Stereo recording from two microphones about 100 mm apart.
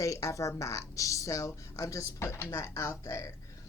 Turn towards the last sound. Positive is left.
turn(degrees=30)  # may be behind; listen again after turning